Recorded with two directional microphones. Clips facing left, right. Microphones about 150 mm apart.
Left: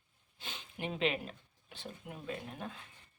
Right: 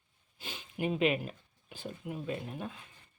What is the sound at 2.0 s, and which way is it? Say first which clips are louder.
Speech: right 9 dB; 5° right (ahead or behind).